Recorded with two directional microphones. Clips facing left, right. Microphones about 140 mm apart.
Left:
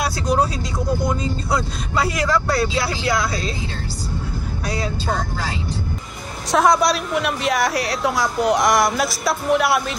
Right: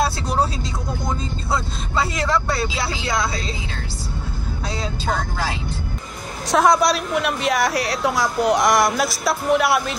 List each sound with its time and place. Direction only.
1.0 s vehicle: 25° right (ahead or behind)
2.8 s speech: 20° right (ahead or behind)
4.6 s speech: 25° right (ahead or behind)
6.5 s a woman's voice: centre (ahead or behind)